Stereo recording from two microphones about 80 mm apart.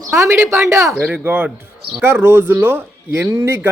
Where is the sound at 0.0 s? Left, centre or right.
Right.